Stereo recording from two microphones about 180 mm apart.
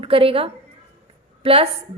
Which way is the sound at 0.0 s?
30° right (ahead or behind).